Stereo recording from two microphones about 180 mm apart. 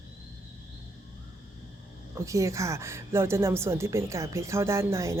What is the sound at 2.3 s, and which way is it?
A woman's voice, 15° right (ahead or behind).